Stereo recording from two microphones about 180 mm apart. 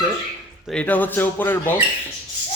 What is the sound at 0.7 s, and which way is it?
Speech, 5° left (ahead or behind).